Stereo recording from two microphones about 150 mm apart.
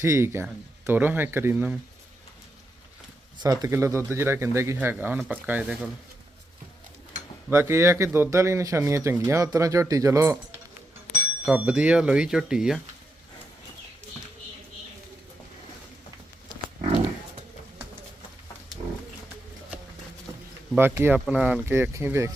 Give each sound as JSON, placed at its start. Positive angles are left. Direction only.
{"t": 0.0, "sound": "speech", "side_deg": -20}
{"t": 3.3, "sound": "speech", "side_deg": -25}
{"t": 7.5, "sound": "speech", "side_deg": -15}
{"t": 11.4, "sound": "speech", "side_deg": -5}
{"t": 20.3, "sound": "a sound", "side_deg": -20}
{"t": 20.7, "sound": "speech", "side_deg": -15}